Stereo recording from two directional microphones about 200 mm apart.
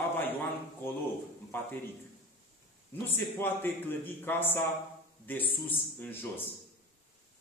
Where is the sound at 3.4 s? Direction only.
10° left (ahead or behind).